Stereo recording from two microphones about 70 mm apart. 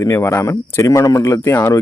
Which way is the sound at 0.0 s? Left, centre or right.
Left.